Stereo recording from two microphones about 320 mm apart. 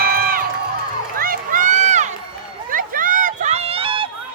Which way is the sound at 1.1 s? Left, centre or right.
Right.